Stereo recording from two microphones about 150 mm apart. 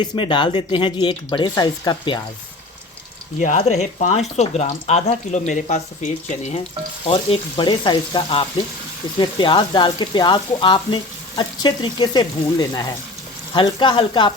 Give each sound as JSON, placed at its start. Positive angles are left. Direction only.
{"t": 0.0, "sound": "speech", "side_deg": 35}
{"t": 3.6, "sound": "speech", "side_deg": 50}
{"t": 7.1, "sound": "speech", "side_deg": 35}